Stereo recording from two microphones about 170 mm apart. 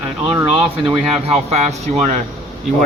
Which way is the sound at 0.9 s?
35° right (ahead or behind).